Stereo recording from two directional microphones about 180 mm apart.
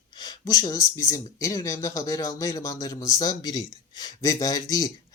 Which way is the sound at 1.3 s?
15° left (ahead or behind).